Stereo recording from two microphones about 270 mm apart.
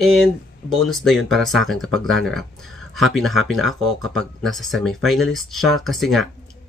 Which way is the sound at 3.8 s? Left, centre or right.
Right.